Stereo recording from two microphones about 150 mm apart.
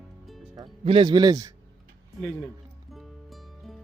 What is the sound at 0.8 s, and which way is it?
Speech, 35° right (ahead or behind).